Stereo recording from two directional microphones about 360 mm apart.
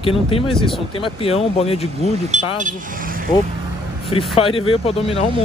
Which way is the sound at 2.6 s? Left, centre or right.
Right.